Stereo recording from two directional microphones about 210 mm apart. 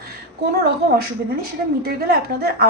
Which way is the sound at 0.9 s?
45° right (ahead or behind).